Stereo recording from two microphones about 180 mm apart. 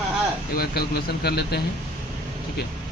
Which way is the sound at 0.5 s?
60° left (ahead or behind).